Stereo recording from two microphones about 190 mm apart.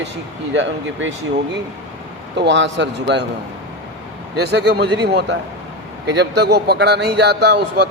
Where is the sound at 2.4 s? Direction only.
70° right (ahead or behind).